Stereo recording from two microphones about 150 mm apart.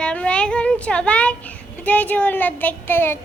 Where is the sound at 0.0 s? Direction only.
5° left (ahead or behind).